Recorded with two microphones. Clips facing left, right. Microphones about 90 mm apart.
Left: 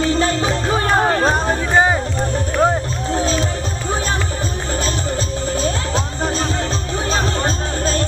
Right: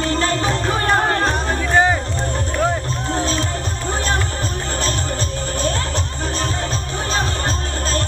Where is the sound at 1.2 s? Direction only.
15° left (ahead or behind).